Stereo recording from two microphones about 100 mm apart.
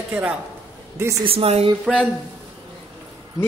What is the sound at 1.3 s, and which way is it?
Speech, 80° right.